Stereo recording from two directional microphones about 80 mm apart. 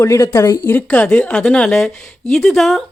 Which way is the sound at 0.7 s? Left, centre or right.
Centre.